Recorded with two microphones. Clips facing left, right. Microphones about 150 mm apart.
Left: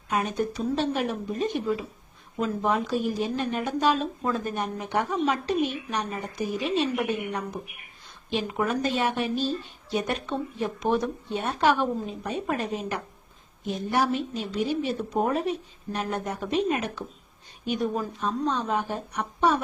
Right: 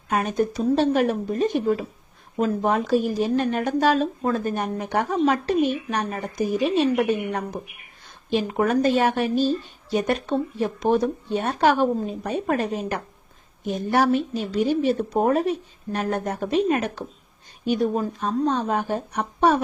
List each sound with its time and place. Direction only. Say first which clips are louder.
0.1 s speech: right 4 dB; 45° right (ahead or behind)
8.3 s speech: right 5 dB; 45° right (ahead or behind)